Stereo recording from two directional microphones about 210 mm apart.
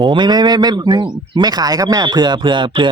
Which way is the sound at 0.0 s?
20° right (ahead or behind).